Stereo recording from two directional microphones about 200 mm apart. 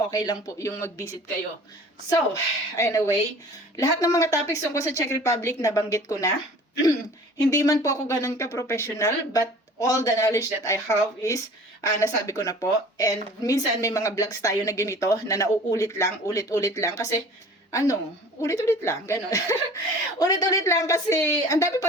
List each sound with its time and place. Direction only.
0.1 s speech: 15° left (ahead or behind)
7.5 s a woman's voice: 15° left (ahead or behind)